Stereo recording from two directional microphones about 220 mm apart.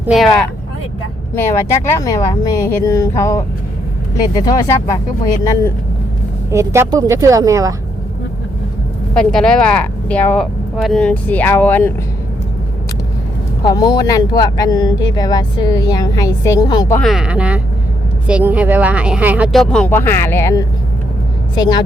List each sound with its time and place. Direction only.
0.0 s speech: centre (ahead or behind)
1.4 s speech: 10° left (ahead or behind)
4.4 s speech: 15° left (ahead or behind)
6.5 s a woman's voice: 10° right (ahead or behind)
9.1 s speech: 5° left (ahead or behind)
13.7 s speech: 15° left (ahead or behind)
17.0 s a woman's voice: centre (ahead or behind); by 21.8 s 20° left (ahead or behind)